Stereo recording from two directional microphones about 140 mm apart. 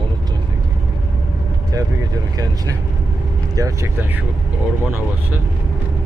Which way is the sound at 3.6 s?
25° right (ahead or behind).